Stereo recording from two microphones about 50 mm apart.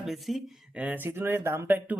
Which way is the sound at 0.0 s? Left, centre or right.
Centre.